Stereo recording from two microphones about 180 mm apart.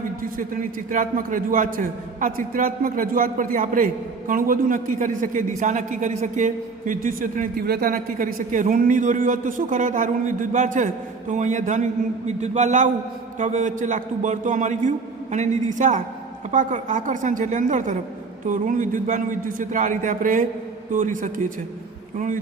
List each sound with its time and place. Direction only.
0.2 s a man's voice: 50° right (ahead or behind)